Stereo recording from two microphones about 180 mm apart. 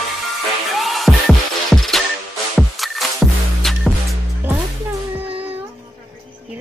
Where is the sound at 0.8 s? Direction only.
Centre (ahead or behind).